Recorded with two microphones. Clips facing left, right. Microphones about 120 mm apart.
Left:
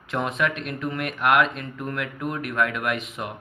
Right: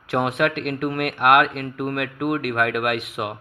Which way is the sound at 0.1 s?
70° right (ahead or behind).